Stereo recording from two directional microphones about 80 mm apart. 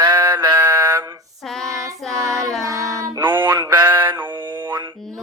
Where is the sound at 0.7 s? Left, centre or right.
Right.